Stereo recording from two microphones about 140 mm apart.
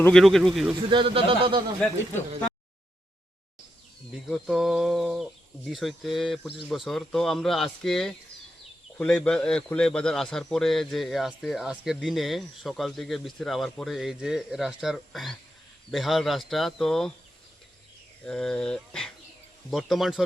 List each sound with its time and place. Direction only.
0.1 s speech: centre (ahead or behind)
0.8 s speech: 35° right (ahead or behind)
4.1 s speech: centre (ahead or behind)
18.3 s speech: 5° left (ahead or behind)